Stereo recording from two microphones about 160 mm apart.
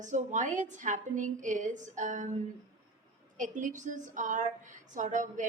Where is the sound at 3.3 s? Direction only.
55° right (ahead or behind).